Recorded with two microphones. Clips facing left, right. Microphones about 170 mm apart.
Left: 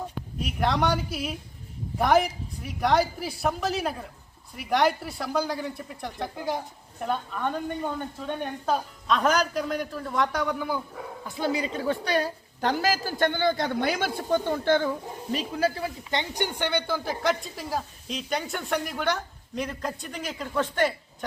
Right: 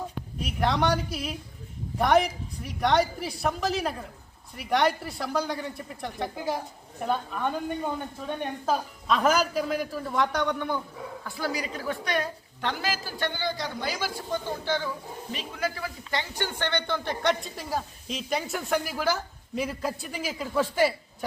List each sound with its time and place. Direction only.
0.3 s speech: centre (ahead or behind)
11.2 s a woman's voice: 20° left (ahead or behind); by 14.8 s 55° left (ahead or behind)
15.3 s speech: 35° left (ahead or behind); by 21.2 s 5° right (ahead or behind)